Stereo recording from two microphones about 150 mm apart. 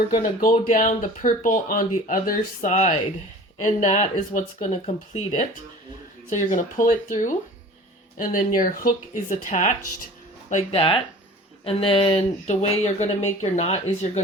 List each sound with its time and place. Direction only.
0.7 s speech: 60° left (ahead or behind)
10.5 s speech: 40° left (ahead or behind)